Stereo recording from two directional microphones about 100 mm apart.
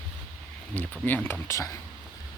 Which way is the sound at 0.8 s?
20° left (ahead or behind).